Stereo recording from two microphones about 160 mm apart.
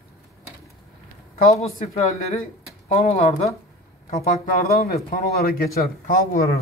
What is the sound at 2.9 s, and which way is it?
Speech, 40° left (ahead or behind).